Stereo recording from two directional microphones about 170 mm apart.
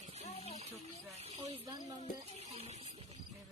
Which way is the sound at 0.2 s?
40° left (ahead or behind).